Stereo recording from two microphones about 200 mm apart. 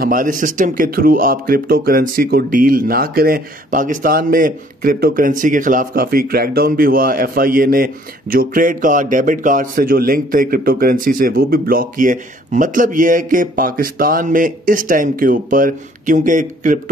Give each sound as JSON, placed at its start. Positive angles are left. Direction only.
{"t": 0.0, "sound": "speech", "side_deg": -45}